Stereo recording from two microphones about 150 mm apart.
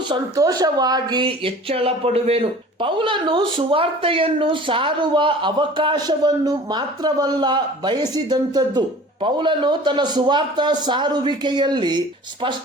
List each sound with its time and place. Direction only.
0.1 s speech: 25° right (ahead or behind)